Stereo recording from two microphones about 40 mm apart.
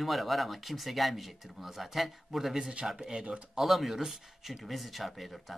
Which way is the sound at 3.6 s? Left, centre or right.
Centre.